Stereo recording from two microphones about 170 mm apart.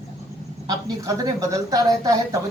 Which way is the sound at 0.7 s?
20° right (ahead or behind).